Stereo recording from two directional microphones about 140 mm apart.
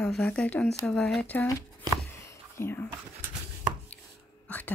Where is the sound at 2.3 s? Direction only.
15° left (ahead or behind).